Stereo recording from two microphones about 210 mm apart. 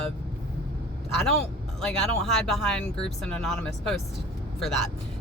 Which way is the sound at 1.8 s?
5° left (ahead or behind).